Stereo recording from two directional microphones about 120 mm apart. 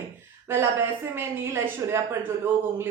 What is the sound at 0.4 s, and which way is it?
A woman's voice, 20° right (ahead or behind).